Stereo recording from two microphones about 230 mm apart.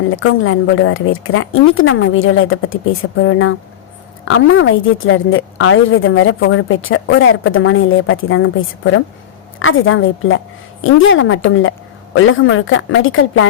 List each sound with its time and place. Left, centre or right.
0.1 s a woman's voice: left